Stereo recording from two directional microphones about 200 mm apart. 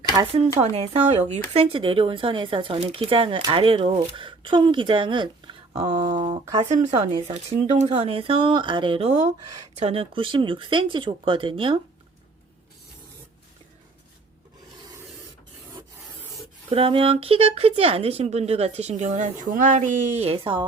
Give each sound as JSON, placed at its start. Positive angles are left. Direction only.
{"t": 0.2, "sound": "speech", "side_deg": -30}
{"t": 7.1, "sound": "speech", "side_deg": -35}
{"t": 16.6, "sound": "a woman's voice", "side_deg": -25}